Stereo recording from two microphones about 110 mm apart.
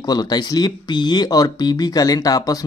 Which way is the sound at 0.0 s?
40° left (ahead or behind).